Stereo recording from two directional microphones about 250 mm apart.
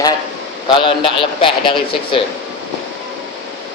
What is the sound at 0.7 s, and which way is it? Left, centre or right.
A man's voice, centre.